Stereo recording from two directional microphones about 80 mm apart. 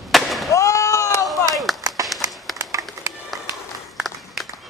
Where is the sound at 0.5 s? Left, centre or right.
Left.